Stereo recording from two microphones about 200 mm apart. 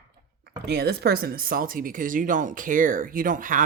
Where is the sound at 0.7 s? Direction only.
55° right (ahead or behind).